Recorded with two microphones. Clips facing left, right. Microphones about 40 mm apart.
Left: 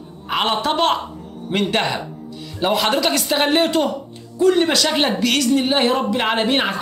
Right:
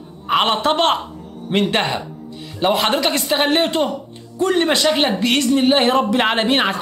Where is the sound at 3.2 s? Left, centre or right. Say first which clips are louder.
Right 1 dB; centre.